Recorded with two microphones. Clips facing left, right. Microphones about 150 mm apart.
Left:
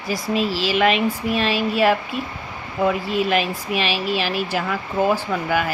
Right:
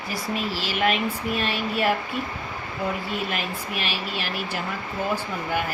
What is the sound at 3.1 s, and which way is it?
Speech, 90° left.